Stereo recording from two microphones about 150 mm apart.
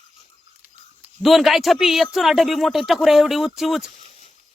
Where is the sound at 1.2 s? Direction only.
Centre (ahead or behind).